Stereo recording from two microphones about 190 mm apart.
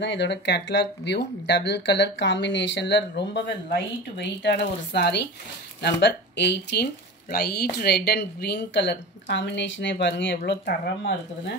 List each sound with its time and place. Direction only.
0.0 s speech: 65° left (ahead or behind)